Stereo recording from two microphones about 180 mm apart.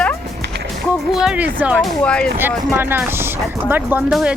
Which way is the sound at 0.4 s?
65° right (ahead or behind).